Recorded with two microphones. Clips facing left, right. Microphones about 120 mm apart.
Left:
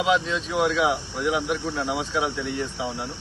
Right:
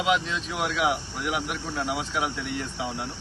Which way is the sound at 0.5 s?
25° left (ahead or behind).